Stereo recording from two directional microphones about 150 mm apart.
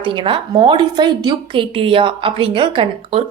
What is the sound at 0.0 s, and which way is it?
A woman's voice, 35° right (ahead or behind).